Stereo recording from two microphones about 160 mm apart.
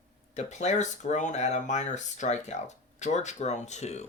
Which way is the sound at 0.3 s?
45° left (ahead or behind).